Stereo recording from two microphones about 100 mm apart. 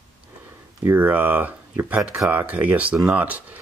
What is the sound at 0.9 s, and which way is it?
Speech, 15° right (ahead or behind).